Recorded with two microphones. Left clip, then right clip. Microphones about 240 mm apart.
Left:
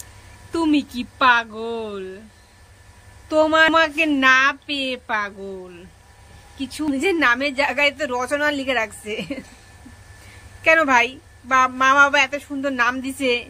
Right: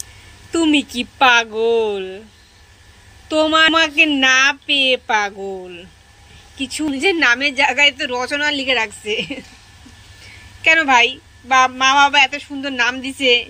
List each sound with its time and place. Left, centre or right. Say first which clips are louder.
0.5 s a woman's voice: right 4 dB; centre
3.3 s a woman's voice: right 2 dB; centre
10.6 s a woman's voice: right 3 dB; centre